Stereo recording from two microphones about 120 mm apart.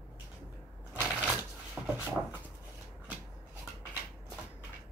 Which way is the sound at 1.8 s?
5° left (ahead or behind).